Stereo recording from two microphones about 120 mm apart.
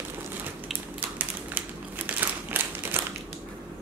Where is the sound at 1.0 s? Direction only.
15° right (ahead or behind).